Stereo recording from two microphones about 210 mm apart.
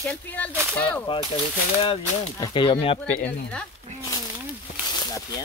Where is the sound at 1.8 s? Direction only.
20° left (ahead or behind).